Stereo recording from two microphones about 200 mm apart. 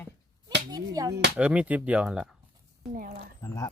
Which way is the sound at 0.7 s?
20° right (ahead or behind).